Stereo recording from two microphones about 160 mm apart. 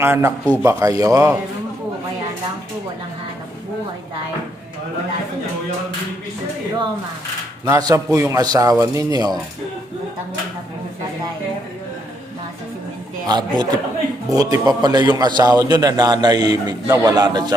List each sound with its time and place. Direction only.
0.0 s a man's voice: 15° right (ahead or behind)
7.6 s a man's voice: 25° right (ahead or behind)
13.2 s a man's voice: 25° right (ahead or behind)